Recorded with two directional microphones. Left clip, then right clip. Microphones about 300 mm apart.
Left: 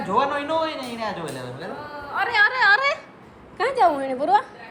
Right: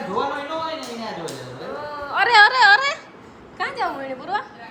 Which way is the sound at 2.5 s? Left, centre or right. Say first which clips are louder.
Right 3 dB; centre.